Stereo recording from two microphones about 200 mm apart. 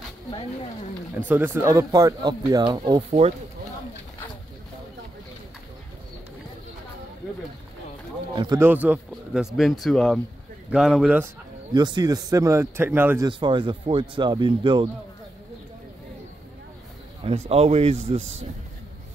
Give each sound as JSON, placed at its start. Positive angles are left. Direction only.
{"t": 1.1, "sound": "speech", "side_deg": -10}
{"t": 8.4, "sound": "speech", "side_deg": -15}
{"t": 11.7, "sound": "speech", "side_deg": -20}
{"t": 13.3, "sound": "speech", "side_deg": -25}
{"t": 17.5, "sound": "speech", "side_deg": -30}